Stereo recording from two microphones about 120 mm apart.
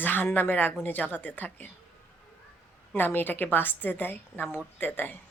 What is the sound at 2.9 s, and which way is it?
Speech, 15° left (ahead or behind).